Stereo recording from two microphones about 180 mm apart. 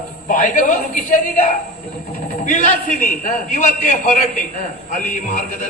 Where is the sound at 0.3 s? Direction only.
45° left (ahead or behind).